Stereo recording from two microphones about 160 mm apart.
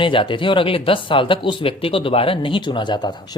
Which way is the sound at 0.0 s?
30° left (ahead or behind).